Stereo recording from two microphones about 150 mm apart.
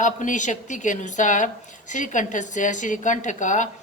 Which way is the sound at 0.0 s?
55° left (ahead or behind).